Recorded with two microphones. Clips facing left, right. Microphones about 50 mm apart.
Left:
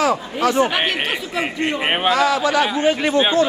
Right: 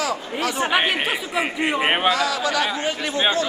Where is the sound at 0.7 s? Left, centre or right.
Centre.